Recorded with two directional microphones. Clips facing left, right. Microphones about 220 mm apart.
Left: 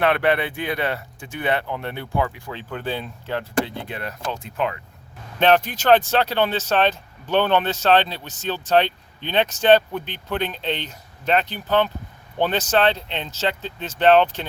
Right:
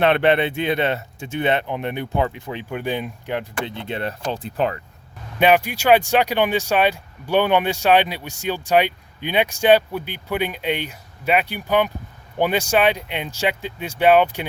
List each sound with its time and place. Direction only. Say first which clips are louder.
0.0 s speech: right 3 dB; 25° right (ahead or behind)
5.4 s speech: right 1 dB; 10° right (ahead or behind)